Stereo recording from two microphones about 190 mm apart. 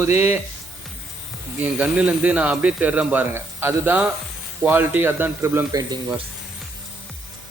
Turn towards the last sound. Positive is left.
turn(degrees=-25)  # may be behind; listen again after turning